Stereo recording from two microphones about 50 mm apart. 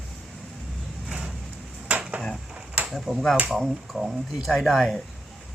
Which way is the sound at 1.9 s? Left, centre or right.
Right.